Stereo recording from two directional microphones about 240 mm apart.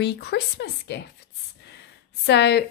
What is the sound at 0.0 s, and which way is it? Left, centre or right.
A woman's voice, left.